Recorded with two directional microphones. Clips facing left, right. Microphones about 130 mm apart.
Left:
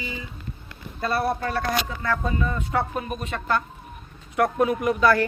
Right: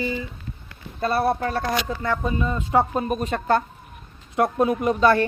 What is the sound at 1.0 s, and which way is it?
Speech, 35° right (ahead or behind).